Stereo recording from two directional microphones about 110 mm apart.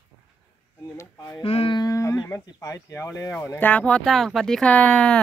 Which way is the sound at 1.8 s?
30° left (ahead or behind).